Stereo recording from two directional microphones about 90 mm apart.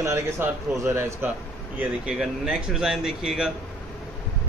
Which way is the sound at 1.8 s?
10° right (ahead or behind).